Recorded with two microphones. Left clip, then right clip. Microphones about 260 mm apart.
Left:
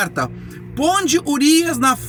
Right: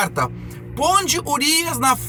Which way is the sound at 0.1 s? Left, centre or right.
Centre.